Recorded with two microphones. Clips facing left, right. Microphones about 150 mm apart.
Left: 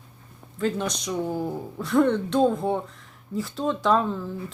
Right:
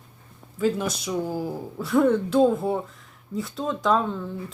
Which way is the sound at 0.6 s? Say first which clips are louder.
Right 2 dB; 5° right (ahead or behind).